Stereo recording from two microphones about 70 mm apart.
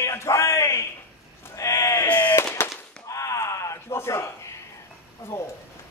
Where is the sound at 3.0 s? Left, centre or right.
Left.